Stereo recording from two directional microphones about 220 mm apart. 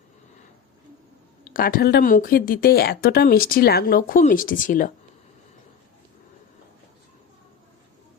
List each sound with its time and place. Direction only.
1.5 s speech: 40° left (ahead or behind)